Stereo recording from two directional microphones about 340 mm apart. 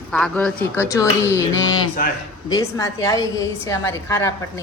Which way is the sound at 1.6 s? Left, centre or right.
Left.